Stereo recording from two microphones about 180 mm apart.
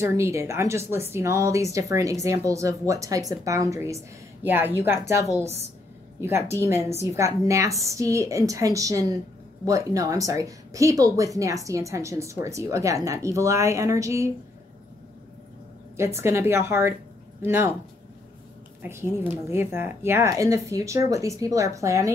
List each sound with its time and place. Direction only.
0.0 s speech: 15° right (ahead or behind)
6.2 s speech: 15° right (ahead or behind)
16.0 s speech: 15° right (ahead or behind)
18.8 s a woman's voice: 15° right (ahead or behind)